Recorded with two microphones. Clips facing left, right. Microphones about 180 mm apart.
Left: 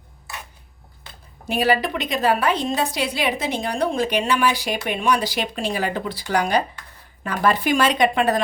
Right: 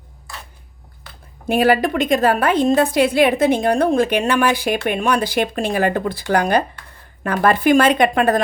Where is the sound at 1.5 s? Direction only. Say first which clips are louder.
Right 5 dB; 50° right (ahead or behind).